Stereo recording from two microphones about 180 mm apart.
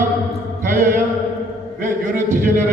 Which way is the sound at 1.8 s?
50° right (ahead or behind).